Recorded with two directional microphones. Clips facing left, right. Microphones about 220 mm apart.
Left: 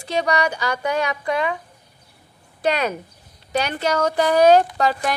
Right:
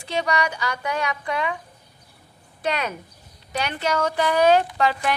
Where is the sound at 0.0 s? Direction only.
40° left (ahead or behind).